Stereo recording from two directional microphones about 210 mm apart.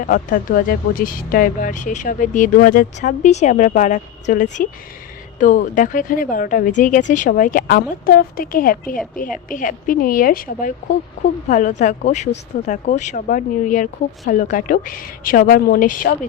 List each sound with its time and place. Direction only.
0.0 s speech: 40° left (ahead or behind)